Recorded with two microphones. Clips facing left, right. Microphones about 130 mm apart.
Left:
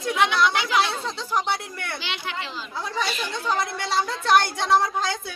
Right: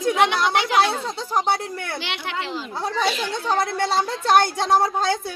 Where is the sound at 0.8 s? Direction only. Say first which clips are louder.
Right 4 dB; 40° right (ahead or behind).